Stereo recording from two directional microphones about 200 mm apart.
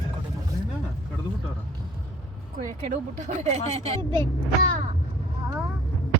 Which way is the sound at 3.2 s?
35° right (ahead or behind).